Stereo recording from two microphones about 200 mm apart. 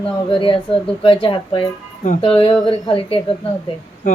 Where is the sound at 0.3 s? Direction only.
25° left (ahead or behind).